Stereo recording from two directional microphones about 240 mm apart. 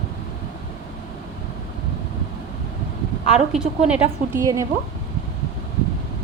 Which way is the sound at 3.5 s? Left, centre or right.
Centre.